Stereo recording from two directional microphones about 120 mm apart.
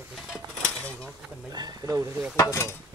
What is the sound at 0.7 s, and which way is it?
Speech, 10° left (ahead or behind).